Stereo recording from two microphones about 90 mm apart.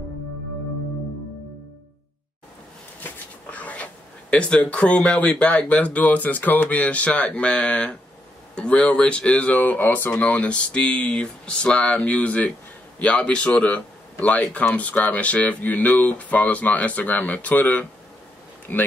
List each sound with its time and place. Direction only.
3.0 s speech: 15° left (ahead or behind)